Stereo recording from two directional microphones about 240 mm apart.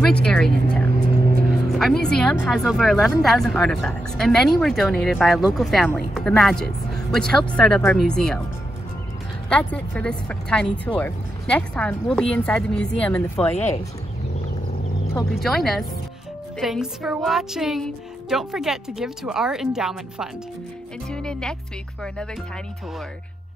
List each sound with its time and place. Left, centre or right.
0.0 s a woman's voice: centre
9.5 s a woman's voice: centre
15.4 s a woman's voice: centre